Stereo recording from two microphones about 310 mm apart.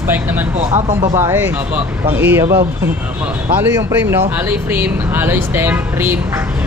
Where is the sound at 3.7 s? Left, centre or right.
Centre.